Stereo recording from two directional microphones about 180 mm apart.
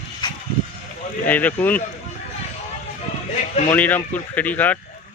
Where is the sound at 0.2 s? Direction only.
25° left (ahead or behind).